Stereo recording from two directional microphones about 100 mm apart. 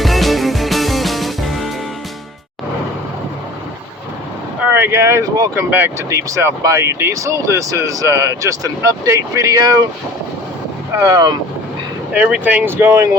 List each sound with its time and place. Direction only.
0.0 s music: centre (ahead or behind)
4.6 s speech: 20° right (ahead or behind); by 9.8 s 40° right (ahead or behind)
10.9 s speech: 30° right (ahead or behind)
12.1 s speech: 15° right (ahead or behind)